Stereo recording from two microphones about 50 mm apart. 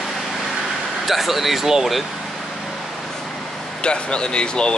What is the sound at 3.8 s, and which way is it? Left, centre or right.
Speech, centre.